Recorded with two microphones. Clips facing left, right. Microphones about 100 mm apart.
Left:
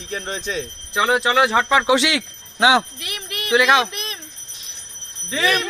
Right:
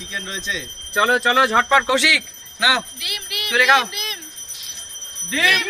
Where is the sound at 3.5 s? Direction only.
20° left (ahead or behind).